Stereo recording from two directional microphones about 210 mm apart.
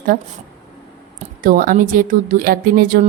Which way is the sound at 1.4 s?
40° right (ahead or behind).